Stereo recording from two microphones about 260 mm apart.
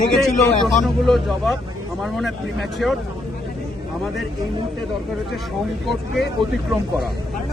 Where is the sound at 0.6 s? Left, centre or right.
Centre.